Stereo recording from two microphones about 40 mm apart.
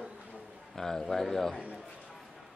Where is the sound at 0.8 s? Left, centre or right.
Centre.